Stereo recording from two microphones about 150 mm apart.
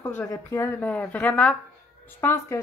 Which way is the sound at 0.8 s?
10° left (ahead or behind).